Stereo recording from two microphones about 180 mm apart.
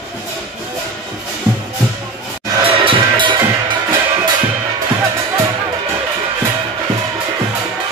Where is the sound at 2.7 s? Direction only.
30° right (ahead or behind).